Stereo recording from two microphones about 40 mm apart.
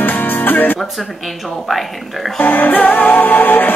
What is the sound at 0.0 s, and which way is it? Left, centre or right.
Music, left.